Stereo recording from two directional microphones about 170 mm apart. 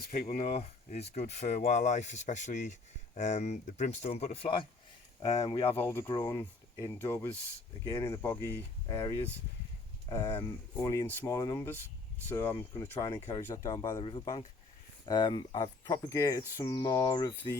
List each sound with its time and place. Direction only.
0.0 s speech: 60° left (ahead or behind)
0.5 s speech: 40° left (ahead or behind)
5.7 s speech: 15° left (ahead or behind)
15.0 s speech: 25° left (ahead or behind)